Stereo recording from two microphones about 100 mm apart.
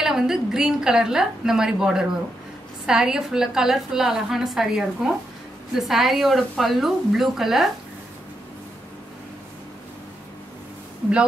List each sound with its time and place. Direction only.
0.0 s a woman's voice: 5° right (ahead or behind)